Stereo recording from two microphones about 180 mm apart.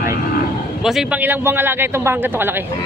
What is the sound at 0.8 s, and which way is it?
A man's voice, 5° right (ahead or behind).